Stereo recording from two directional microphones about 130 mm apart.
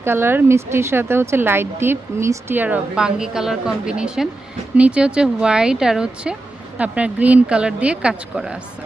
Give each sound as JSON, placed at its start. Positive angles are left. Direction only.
{"t": 0.0, "sound": "a woman's voice", "side_deg": -20}